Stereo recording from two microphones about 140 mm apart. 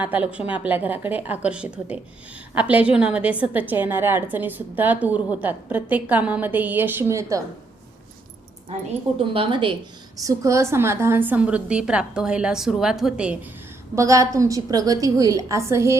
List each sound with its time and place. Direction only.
0.0 s a woman's voice: 10° right (ahead or behind)
9.1 s a woman's voice: 40° right (ahead or behind)
10.2 s a woman's voice: 25° right (ahead or behind); by 13.3 s 5° right (ahead or behind)
13.9 s a woman's voice: 25° right (ahead or behind)